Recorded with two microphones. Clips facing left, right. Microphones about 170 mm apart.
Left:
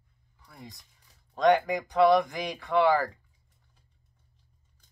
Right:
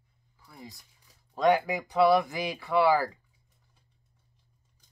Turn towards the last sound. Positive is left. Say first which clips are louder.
# even
turn(degrees=-5)  # may be behind; listen again after turning